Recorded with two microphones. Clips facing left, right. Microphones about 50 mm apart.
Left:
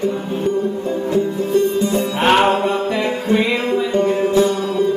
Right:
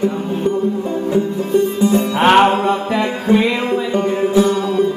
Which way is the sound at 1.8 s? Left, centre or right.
Right.